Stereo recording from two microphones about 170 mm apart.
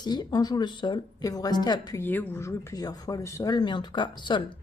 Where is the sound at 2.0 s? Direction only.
10° left (ahead or behind).